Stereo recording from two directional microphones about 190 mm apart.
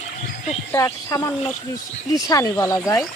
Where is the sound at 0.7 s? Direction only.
15° left (ahead or behind).